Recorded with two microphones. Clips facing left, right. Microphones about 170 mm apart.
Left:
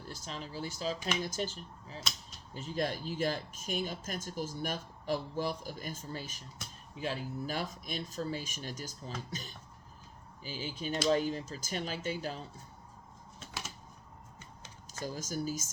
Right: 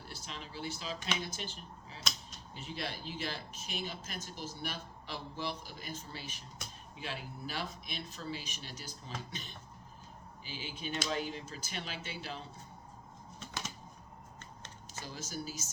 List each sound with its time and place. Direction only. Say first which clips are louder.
0.1 s speech: left 5 dB; 40° left (ahead or behind)
14.9 s speech: left 6 dB; 45° left (ahead or behind)